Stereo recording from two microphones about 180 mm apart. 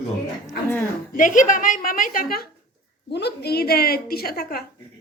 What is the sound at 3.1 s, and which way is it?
A woman's voice, 65° left (ahead or behind).